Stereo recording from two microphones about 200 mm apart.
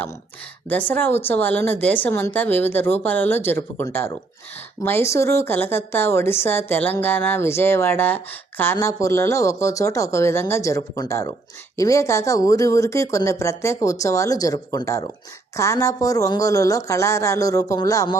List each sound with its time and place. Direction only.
0.7 s a woman's voice: 10° left (ahead or behind)